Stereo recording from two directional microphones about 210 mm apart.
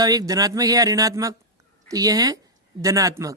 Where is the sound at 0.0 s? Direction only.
15° right (ahead or behind).